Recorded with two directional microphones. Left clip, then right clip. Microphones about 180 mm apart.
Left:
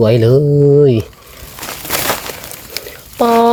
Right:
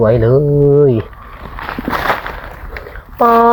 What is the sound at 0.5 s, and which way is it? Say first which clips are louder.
Speech: left 1 dB; 5° left (ahead or behind).